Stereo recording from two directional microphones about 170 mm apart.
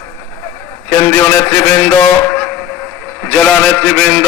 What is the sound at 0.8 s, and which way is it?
A man's voice, 15° left (ahead or behind).